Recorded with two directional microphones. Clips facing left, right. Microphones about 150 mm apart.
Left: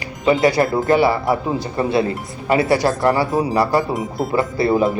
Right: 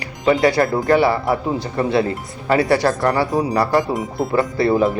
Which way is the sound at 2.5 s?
20° left (ahead or behind).